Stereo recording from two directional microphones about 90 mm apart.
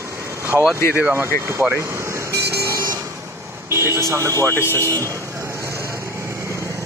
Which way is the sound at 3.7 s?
30° right (ahead or behind).